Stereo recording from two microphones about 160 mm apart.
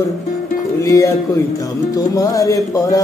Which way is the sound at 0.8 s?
20° left (ahead or behind).